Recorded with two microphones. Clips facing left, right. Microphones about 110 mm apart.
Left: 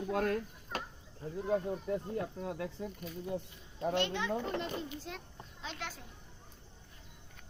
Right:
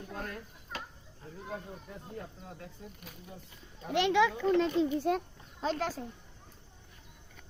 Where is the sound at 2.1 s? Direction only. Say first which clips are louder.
Left 8 dB; 70° left (ahead or behind).